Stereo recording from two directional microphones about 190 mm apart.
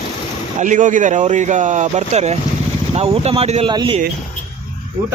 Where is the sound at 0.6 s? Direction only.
40° right (ahead or behind).